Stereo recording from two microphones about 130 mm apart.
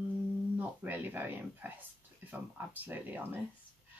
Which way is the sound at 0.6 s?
15° right (ahead or behind).